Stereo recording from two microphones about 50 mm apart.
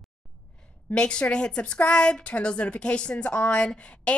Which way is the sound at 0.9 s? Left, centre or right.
Centre.